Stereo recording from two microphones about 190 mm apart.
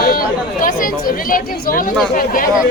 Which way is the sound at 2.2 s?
45° left (ahead or behind).